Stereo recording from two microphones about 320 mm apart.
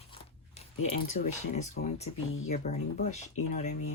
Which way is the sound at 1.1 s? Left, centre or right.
Left.